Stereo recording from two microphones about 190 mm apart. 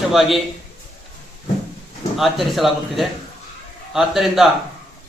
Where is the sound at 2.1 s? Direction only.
Centre (ahead or behind).